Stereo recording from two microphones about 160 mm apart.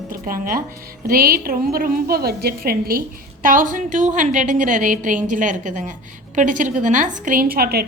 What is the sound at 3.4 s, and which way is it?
A woman's voice, 55° right (ahead or behind).